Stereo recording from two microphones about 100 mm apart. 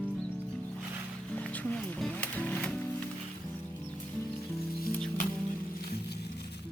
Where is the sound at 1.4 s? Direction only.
15° left (ahead or behind).